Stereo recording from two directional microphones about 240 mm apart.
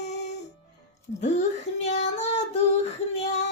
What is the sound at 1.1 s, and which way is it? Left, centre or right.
Female singing, left.